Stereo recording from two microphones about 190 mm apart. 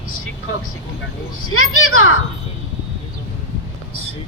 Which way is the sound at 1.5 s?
90° left.